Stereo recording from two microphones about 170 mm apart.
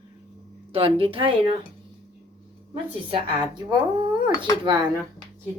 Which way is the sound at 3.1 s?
30° right (ahead or behind).